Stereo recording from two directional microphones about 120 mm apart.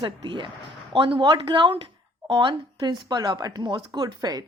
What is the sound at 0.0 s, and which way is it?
A woman's voice, 40° right (ahead or behind).